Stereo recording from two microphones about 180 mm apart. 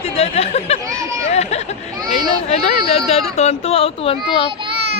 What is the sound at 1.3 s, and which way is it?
Speech, 35° left (ahead or behind).